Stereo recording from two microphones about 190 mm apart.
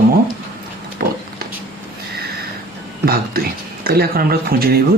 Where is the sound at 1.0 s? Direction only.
50° right (ahead or behind).